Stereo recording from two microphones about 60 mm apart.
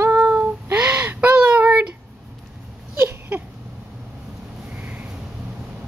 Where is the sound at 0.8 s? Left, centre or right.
Centre.